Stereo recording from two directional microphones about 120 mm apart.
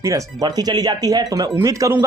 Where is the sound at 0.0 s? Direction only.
25° right (ahead or behind).